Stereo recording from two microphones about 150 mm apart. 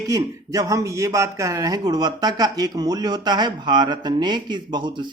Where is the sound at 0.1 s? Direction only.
20° right (ahead or behind).